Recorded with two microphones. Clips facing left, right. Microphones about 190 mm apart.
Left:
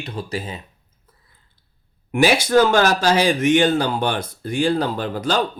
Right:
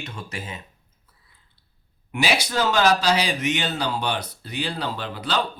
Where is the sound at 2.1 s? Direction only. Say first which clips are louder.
Left 8 dB; 50° left (ahead or behind).